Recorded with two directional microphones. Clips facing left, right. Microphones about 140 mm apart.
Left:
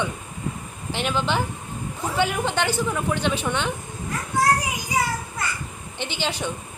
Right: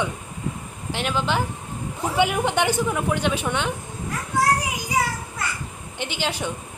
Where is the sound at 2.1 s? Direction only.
15° right (ahead or behind).